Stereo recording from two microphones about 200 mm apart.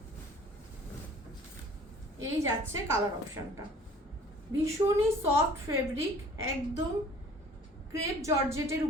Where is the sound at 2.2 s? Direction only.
15° right (ahead or behind).